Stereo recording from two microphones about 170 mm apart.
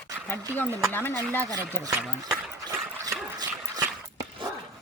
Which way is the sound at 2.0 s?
5° right (ahead or behind).